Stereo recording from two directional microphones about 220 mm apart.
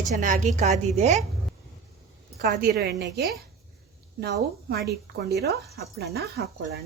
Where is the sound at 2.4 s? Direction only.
45° right (ahead or behind).